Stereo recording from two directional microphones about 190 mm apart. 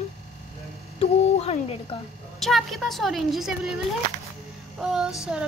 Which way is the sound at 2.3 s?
Centre (ahead or behind).